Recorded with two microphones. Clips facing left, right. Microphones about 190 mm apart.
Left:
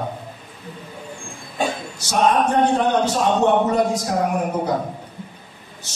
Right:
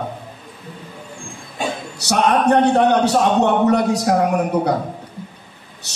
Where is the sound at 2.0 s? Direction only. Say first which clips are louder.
Right 1 dB; 70° right (ahead or behind).